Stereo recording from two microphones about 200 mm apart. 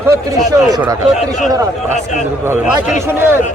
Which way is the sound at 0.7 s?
20° right (ahead or behind).